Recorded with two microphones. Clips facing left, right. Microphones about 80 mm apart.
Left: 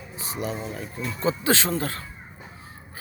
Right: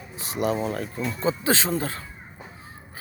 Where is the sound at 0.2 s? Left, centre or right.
Right.